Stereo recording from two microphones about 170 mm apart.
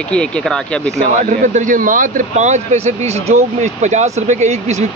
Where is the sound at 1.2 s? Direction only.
50° right (ahead or behind).